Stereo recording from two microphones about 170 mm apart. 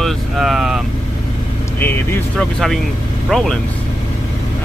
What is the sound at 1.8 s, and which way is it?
Speech, 10° left (ahead or behind).